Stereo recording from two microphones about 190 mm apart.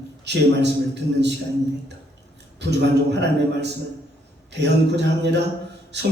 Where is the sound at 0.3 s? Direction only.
65° right (ahead or behind).